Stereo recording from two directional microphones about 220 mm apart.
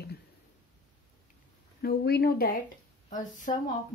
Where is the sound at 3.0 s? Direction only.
35° left (ahead or behind).